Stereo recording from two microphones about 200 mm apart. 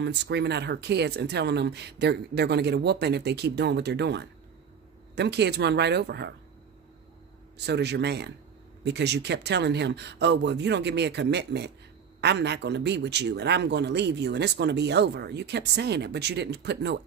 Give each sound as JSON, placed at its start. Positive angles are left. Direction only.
{"t": 0.0, "sound": "a man's voice", "side_deg": -60}
{"t": 7.5, "sound": "a man's voice", "side_deg": -55}